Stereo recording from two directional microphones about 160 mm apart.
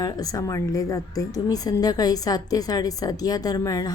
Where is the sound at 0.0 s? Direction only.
25° left (ahead or behind).